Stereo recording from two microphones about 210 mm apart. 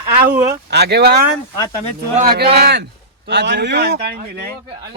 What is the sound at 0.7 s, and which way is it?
Speech, 50° right (ahead or behind).